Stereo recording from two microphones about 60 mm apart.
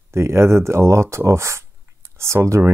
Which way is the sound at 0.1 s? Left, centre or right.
Right.